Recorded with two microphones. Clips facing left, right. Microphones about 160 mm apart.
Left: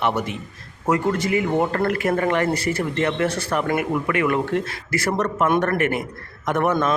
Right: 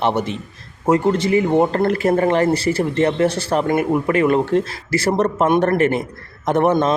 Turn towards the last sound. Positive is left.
turn(degrees=-30)  # may be behind; listen again after turning